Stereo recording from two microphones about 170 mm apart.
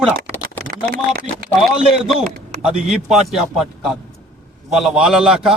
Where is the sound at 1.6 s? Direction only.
Centre (ahead or behind).